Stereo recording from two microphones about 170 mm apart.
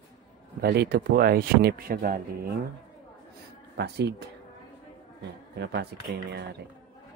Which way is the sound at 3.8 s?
80° right.